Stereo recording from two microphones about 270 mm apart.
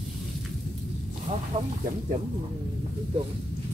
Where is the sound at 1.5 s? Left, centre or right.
Centre.